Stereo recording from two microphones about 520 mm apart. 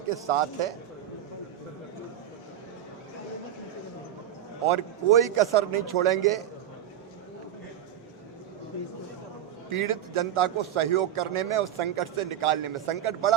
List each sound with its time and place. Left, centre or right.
0.1 s a man's voice: right
4.6 s a man's voice: right
9.7 s a man's voice: right